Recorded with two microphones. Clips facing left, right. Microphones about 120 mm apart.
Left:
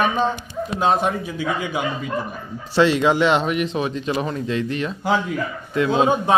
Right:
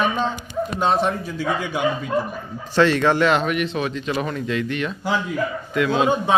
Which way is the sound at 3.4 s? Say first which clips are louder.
Left 1 dB; 30° left (ahead or behind).